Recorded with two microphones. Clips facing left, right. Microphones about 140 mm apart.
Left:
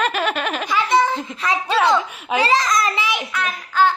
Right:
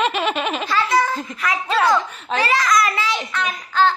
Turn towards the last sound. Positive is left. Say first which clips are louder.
# even
turn(degrees=10)  # may be behind; listen again after turning